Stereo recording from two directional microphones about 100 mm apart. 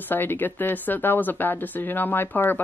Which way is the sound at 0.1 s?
20° left (ahead or behind).